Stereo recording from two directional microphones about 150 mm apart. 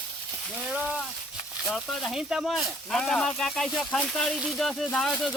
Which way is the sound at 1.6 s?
Centre (ahead or behind).